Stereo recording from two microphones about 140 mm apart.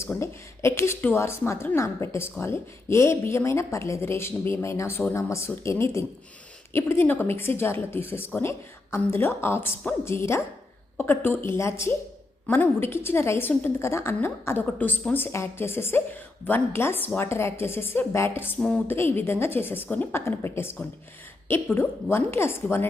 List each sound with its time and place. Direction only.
0.0 s a woman's voice: 20° left (ahead or behind)
21.8 s a woman's voice: 15° left (ahead or behind)